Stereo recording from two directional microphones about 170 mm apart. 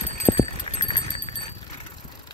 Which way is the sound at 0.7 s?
35° left (ahead or behind).